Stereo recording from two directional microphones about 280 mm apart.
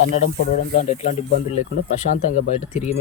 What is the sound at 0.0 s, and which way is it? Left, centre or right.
Speech, left.